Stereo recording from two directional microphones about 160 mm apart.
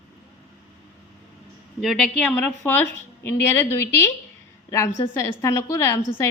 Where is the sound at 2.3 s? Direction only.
10° left (ahead or behind).